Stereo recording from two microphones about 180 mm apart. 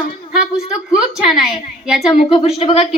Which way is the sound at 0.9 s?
Centre (ahead or behind).